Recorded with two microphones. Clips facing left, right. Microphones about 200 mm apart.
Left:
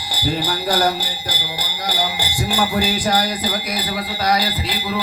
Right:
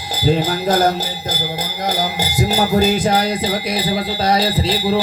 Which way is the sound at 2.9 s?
25° right (ahead or behind).